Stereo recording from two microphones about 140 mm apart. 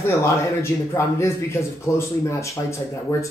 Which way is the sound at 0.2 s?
20° left (ahead or behind).